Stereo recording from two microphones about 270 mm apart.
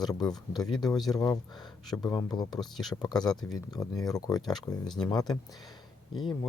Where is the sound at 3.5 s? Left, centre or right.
Centre.